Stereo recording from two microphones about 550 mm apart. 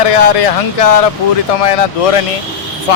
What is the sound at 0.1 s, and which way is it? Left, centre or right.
Speech, left.